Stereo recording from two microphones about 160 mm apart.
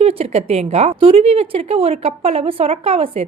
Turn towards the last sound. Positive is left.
turn(degrees=-35)  # may be behind; listen again after turning